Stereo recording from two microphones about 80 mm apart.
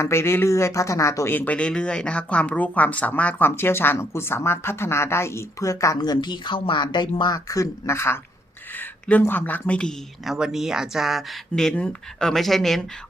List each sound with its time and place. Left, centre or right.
0.0 s speech: left
1.3 s speech: left
1.5 s speech: centre; by 6.0 s left
6.0 s speech: left
7.3 s speech: left
8.7 s speech: left
10.2 s speech: centre